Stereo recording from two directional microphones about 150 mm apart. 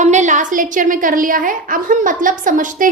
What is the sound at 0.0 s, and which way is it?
A woman's voice, 50° right (ahead or behind).